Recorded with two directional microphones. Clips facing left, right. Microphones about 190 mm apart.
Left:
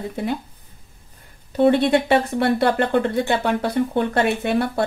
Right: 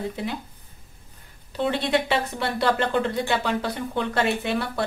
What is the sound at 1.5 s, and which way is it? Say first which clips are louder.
Speech: left 8 dB; 55° left (ahead or behind).